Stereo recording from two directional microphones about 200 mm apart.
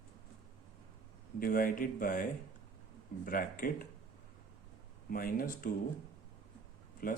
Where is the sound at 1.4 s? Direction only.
45° left (ahead or behind).